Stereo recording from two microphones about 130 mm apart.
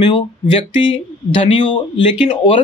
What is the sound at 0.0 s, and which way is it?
Speech, 40° left (ahead or behind).